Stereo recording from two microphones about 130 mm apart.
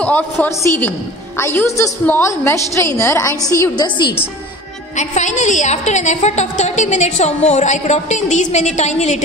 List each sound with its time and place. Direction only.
0.0 s a woman's voice: 10° left (ahead or behind)
4.9 s a woman's voice: 65° left (ahead or behind)